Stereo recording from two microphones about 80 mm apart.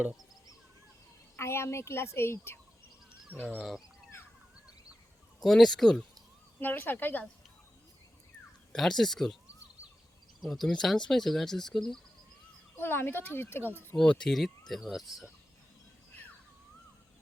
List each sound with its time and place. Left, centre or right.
1.4 s speech: left
3.6 s speech: centre
5.4 s speech: centre
6.6 s speech: left
8.7 s speech: centre
10.4 s speech: centre
12.7 s speech: left
13.9 s speech: centre